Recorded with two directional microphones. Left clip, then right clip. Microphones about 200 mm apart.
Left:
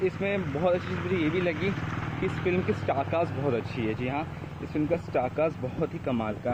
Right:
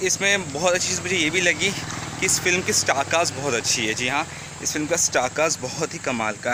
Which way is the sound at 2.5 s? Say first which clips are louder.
Right 7 dB; 45° right (ahead or behind).